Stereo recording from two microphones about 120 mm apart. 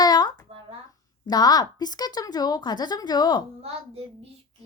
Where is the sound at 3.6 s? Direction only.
55° right (ahead or behind).